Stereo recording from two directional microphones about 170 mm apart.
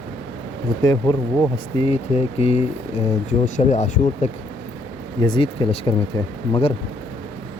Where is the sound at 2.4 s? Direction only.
35° left (ahead or behind).